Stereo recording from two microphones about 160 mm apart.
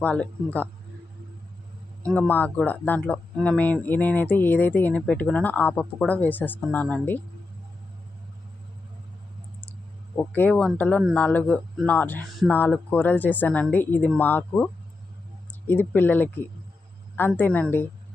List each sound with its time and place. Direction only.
0.0 s speech: 10° left (ahead or behind)
2.1 s speech: 10° left (ahead or behind)
10.2 s speech: 10° left (ahead or behind)